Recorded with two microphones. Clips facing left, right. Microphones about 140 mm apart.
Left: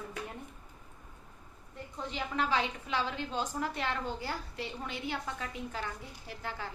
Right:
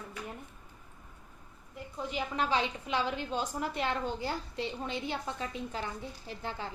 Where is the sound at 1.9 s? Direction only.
15° right (ahead or behind).